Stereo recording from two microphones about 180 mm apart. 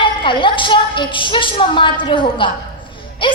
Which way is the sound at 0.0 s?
30° left (ahead or behind).